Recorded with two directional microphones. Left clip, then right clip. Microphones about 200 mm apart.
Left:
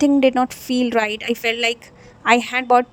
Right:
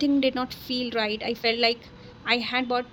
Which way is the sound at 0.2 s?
40° left (ahead or behind).